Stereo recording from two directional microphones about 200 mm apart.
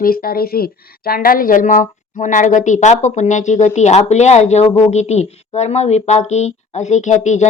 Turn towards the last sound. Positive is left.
turn(degrees=35)  # may be behind; listen again after turning